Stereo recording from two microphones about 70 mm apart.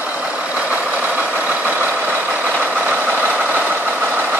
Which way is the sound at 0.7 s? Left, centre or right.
Right.